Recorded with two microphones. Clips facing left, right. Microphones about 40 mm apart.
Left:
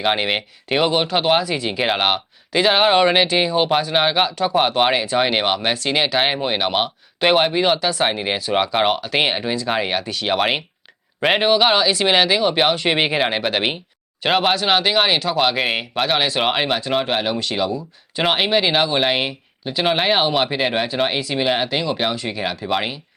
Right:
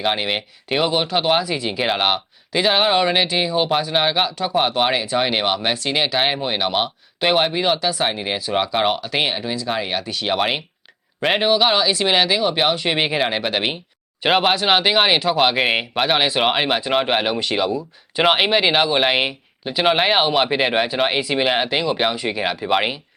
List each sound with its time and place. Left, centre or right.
0.0 s speech: centre
9.2 s speech: centre
10.0 s speech: centre
14.3 s speech: centre